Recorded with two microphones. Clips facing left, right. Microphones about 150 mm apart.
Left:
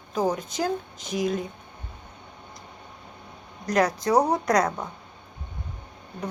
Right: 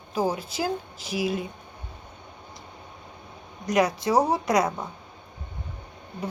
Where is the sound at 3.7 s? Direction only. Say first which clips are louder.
Left 1 dB; centre (ahead or behind).